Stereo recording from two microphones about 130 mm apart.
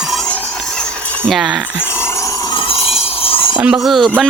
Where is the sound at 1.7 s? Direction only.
20° left (ahead or behind).